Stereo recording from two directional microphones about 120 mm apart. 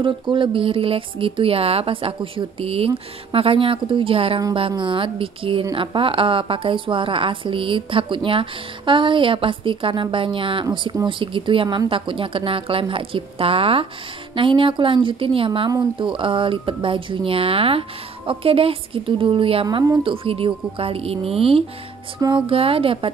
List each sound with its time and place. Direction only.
0.0 s a woman's voice: 45° right (ahead or behind)